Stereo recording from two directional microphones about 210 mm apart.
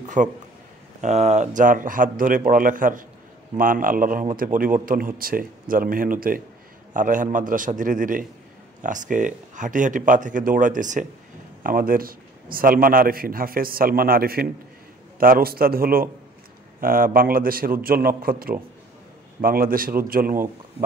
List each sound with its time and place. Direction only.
0.0 s a man's voice: 35° right (ahead or behind)